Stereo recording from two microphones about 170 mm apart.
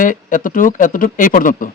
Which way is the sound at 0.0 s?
50° left (ahead or behind).